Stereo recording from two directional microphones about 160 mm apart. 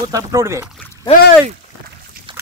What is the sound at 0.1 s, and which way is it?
Speech, 20° right (ahead or behind).